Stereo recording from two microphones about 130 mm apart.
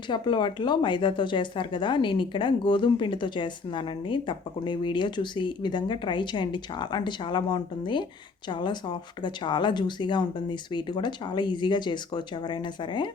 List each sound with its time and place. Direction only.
0.1 s speech: 35° left (ahead or behind)